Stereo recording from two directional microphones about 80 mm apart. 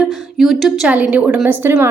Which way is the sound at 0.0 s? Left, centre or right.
Centre.